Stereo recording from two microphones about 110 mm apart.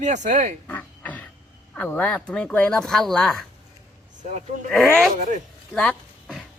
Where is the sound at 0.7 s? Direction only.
15° left (ahead or behind).